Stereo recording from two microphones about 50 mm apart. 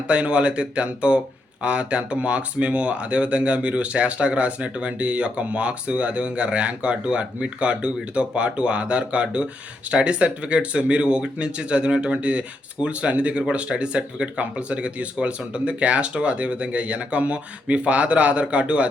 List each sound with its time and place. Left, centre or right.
0.1 s speech: right